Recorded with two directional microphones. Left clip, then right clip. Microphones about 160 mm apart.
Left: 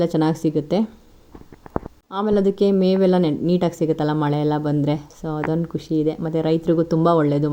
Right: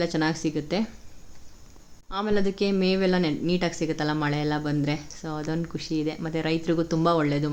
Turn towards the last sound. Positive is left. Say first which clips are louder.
# left 6 dB
turn(degrees=30)  # may be behind; listen again after turning